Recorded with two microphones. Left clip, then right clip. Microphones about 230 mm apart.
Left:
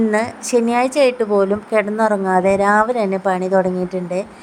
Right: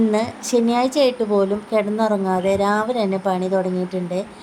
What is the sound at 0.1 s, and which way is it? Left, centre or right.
A woman's voice, left.